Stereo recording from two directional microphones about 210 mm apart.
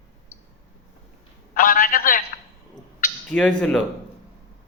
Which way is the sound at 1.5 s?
40° left (ahead or behind).